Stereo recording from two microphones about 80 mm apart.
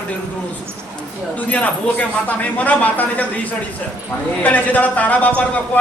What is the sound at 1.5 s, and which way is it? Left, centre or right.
Speech, centre.